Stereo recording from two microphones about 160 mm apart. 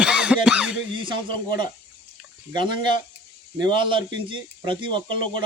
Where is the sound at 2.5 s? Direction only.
30° right (ahead or behind).